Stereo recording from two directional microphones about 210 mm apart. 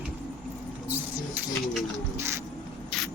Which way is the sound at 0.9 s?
10° right (ahead or behind).